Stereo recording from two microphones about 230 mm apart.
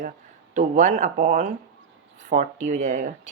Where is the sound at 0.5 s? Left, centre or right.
Right.